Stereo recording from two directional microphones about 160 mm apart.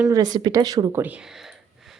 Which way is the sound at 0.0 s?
25° right (ahead or behind).